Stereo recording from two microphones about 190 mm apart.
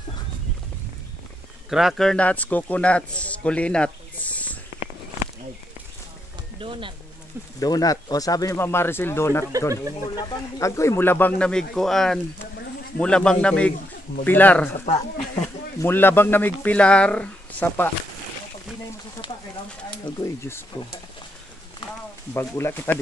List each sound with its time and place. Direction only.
1.7 s speech: centre (ahead or behind)
6.6 s speech: 25° right (ahead or behind)
7.6 s a man's voice: 20° left (ahead or behind)
14.9 s speech: 35° left (ahead or behind)
15.8 s speech: 10° left (ahead or behind)
20.2 s speech: 15° left (ahead or behind)
22.3 s speech: 15° left (ahead or behind)